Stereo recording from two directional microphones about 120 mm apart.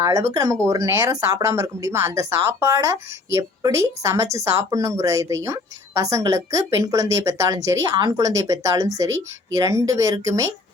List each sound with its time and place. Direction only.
0.0 s speech: 25° right (ahead or behind)